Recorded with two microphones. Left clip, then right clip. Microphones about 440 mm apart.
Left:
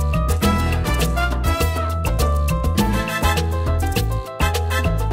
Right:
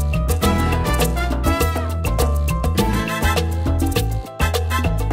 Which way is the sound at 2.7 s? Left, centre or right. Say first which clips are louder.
Right 1 dB; right.